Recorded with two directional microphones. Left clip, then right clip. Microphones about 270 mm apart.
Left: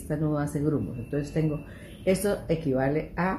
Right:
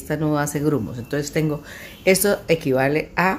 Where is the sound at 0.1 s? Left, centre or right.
Right.